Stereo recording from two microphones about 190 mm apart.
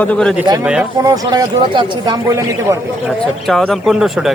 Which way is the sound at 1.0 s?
20° right (ahead or behind).